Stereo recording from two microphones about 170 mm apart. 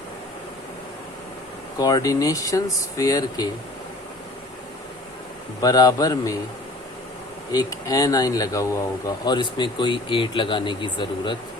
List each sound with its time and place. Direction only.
1.8 s speech: 20° left (ahead or behind)
5.6 s speech: 20° left (ahead or behind)
7.5 s speech: 20° left (ahead or behind)